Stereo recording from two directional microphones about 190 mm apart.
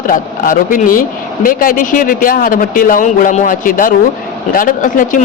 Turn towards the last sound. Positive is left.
turn(degrees=45)  # may be behind; listen again after turning